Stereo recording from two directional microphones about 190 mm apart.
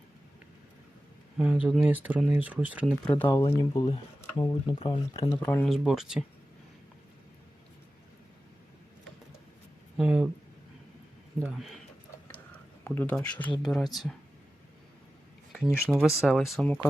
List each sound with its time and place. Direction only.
1.4 s speech: 5° right (ahead or behind)
3.2 s speech: 20° left (ahead or behind)
5.3 s speech: 10° left (ahead or behind)
5.6 s speech: centre (ahead or behind)
10.0 s speech: 5° right (ahead or behind)
11.4 s speech: centre (ahead or behind)
12.8 s speech: 10° left (ahead or behind)
15.7 s speech: 5° left (ahead or behind)